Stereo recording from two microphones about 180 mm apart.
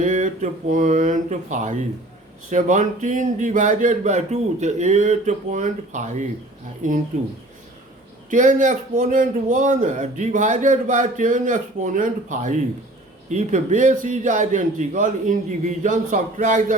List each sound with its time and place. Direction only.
0.0 s speech: 45° right (ahead or behind)
8.3 s speech: 45° right (ahead or behind)